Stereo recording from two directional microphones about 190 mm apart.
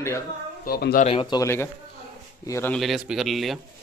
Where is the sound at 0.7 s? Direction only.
55° left (ahead or behind).